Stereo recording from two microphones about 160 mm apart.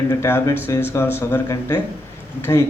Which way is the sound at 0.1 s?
15° left (ahead or behind).